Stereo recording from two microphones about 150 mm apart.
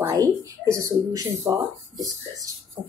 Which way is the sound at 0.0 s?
20° right (ahead or behind).